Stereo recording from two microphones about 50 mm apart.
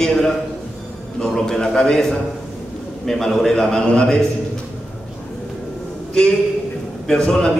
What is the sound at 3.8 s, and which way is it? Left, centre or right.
Speech, left.